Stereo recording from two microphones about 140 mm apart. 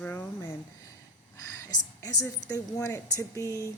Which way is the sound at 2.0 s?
25° left (ahead or behind).